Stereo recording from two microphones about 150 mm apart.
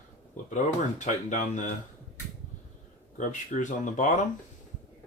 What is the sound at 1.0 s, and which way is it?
Speech, 55° left (ahead or behind).